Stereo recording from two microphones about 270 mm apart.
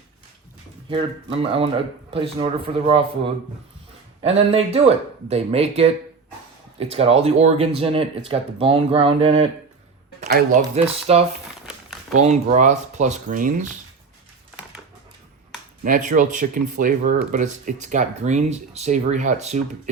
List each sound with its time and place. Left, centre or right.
0.9 s speech: centre
10.2 s speech: right
10.6 s speech: right
15.8 s speech: right